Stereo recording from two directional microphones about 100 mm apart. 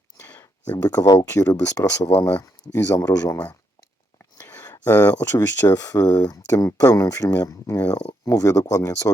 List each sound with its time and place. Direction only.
0.3 s a sound: 20° left (ahead or behind)
0.9 s speech: 40° left (ahead or behind); by 3.1 s 25° left (ahead or behind)
3.1 s speech: 40° left (ahead or behind)
4.4 s a sound: 25° left (ahead or behind)
4.9 s speech: 20° left (ahead or behind)
5.2 s speech: 35° left (ahead or behind)
7.8 s speech: 15° left (ahead or behind)
8.2 s speech: 30° left (ahead or behind)